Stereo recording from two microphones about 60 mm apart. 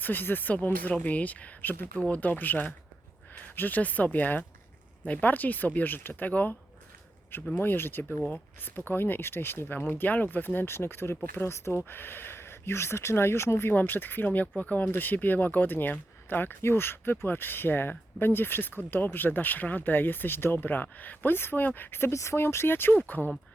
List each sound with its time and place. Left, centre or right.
0.0 s speech: left
7.6 s speech: left
13.7 s speech: left
22.1 s speech: left